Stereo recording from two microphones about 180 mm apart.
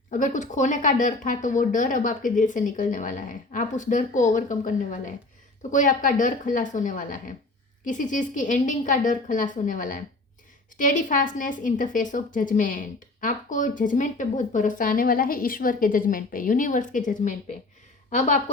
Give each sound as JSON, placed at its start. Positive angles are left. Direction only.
{"t": 0.1, "sound": "a woman's voice", "side_deg": 45}